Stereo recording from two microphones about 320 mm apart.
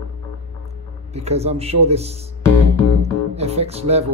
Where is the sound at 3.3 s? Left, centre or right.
Centre.